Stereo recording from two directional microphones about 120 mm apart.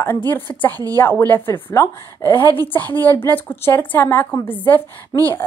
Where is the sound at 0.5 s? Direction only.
25° left (ahead or behind).